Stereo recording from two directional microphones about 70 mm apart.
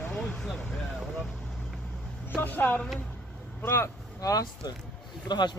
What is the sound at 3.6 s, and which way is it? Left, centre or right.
Speech, left.